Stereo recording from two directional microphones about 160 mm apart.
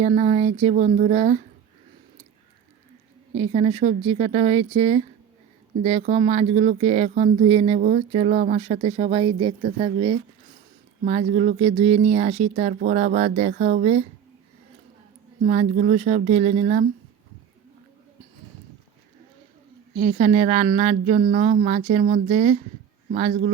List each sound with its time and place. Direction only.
0.0 s speech: 45° right (ahead or behind)
3.3 s speech: 40° right (ahead or behind)
11.0 s speech: 45° right (ahead or behind)
12.8 s speech: 55° right (ahead or behind)
15.4 s speech: 55° right (ahead or behind)
20.0 s speech: 45° right (ahead or behind)